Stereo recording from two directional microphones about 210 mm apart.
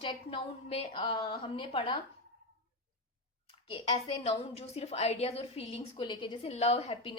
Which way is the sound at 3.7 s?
25° left (ahead or behind).